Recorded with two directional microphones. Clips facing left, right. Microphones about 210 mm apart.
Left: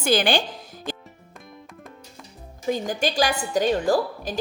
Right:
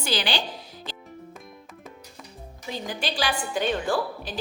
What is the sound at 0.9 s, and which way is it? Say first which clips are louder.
Music: left 11 dB; 45° left (ahead or behind).